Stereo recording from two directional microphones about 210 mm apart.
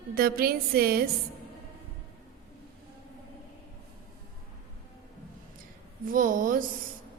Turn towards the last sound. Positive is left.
turn(degrees=-40)  # may be behind; listen again after turning